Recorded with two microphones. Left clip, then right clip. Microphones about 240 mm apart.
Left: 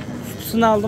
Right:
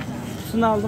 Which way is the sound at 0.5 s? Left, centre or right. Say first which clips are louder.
Left 4 dB; centre.